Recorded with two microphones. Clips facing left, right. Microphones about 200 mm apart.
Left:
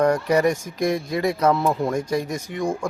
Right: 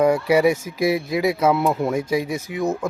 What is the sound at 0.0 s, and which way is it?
A man's voice, 10° right (ahead or behind).